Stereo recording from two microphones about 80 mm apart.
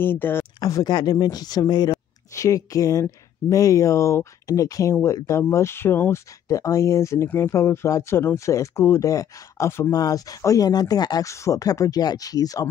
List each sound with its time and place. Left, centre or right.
0.0 s speech: left
0.6 s speech: left
2.3 s speech: left
9.1 s speech: left
9.8 s speech: left
11.2 s speech: left